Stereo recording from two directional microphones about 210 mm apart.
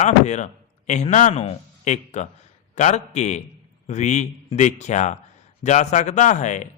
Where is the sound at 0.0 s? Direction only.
35° left (ahead or behind).